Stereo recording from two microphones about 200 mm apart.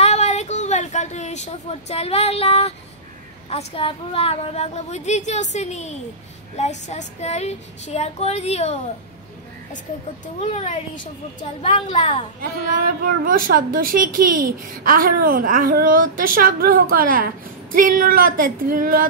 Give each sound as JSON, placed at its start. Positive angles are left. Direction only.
{"t": 0.0, "sound": "a sound", "side_deg": 35}
{"t": 3.4, "sound": "speech", "side_deg": 30}
{"t": 10.4, "sound": "a woman's voice", "side_deg": 35}
{"t": 12.4, "sound": "speech", "side_deg": -45}